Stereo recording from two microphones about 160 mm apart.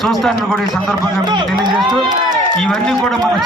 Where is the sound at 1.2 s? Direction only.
25° right (ahead or behind).